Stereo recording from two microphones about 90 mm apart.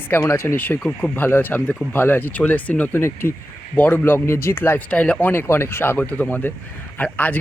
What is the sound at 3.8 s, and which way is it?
Speech, 15° left (ahead or behind).